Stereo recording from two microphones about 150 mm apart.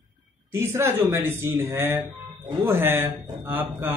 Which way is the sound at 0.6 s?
15° right (ahead or behind).